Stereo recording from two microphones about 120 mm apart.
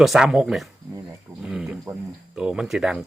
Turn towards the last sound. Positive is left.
turn(degrees=-5)  # may be behind; listen again after turning